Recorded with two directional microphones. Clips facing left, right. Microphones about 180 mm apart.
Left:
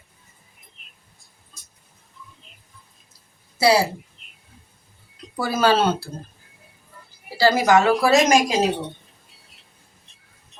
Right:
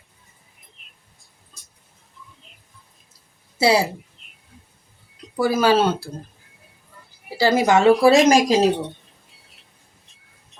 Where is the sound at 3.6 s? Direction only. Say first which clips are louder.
Even; 20° right (ahead or behind).